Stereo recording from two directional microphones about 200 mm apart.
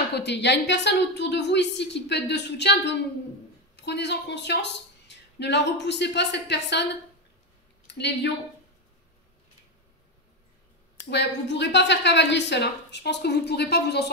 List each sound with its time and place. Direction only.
0.1 s a woman's voice: 60° left (ahead or behind)
11.0 s a woman's voice: 60° left (ahead or behind)